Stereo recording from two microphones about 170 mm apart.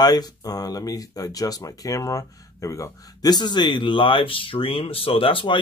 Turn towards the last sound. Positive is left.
turn(degrees=30)  # may be behind; listen again after turning